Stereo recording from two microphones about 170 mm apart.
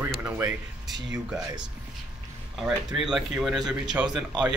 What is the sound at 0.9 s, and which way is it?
Speech, 90° right.